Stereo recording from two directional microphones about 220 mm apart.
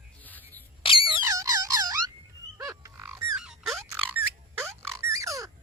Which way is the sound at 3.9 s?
10° right (ahead or behind).